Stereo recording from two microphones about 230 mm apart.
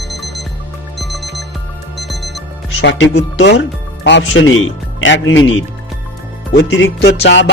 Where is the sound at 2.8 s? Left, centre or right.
Left.